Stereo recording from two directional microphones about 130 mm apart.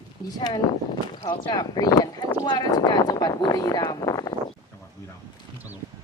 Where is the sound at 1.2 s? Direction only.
30° left (ahead or behind).